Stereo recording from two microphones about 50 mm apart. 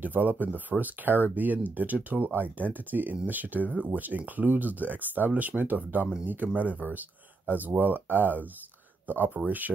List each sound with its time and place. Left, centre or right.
0.0 s speech: right